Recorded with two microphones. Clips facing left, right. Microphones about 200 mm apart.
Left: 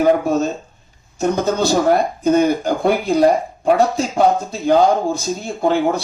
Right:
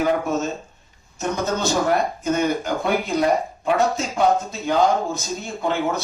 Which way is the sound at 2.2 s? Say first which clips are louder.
Left 7 dB; 35° left (ahead or behind).